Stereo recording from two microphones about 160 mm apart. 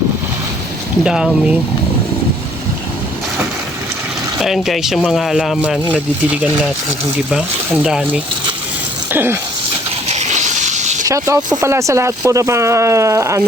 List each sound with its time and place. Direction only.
1.0 s speech: 5° right (ahead or behind)
4.4 s speech: centre (ahead or behind)
7.9 s speech: centre (ahead or behind)
9.1 s speech: 15° right (ahead or behind)
10.1 s a sound: 45° right (ahead or behind)
11.0 s speech: 20° right (ahead or behind)